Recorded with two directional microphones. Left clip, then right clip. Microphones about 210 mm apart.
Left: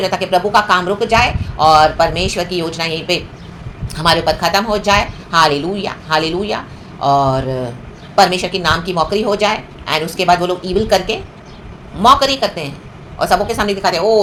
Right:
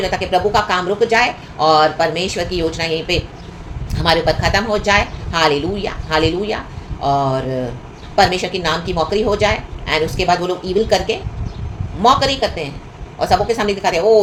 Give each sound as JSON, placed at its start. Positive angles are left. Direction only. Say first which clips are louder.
{"t": 0.0, "sound": "speech", "louder": "left 2 dB", "side_deg": 15}